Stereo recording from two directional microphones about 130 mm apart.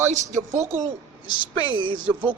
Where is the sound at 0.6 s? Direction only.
20° right (ahead or behind).